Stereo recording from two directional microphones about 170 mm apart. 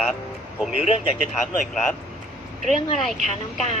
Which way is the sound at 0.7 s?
35° left (ahead or behind).